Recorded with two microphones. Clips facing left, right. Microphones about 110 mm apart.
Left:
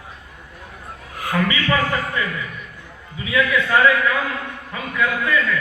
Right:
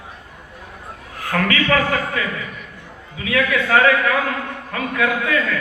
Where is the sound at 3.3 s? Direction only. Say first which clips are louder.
Right 1 dB; 70° right (ahead or behind).